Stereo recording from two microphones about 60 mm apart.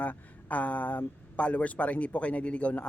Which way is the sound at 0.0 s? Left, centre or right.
Left.